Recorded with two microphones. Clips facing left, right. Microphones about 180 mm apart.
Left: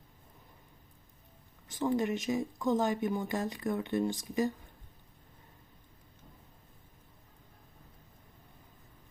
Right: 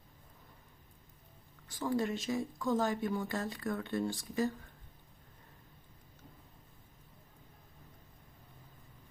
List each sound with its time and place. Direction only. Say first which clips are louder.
1.6 s speech: left 3 dB; 20° left (ahead or behind)